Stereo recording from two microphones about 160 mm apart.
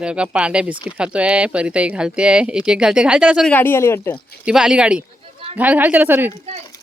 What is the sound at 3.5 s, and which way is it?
Speech, 15° left (ahead or behind).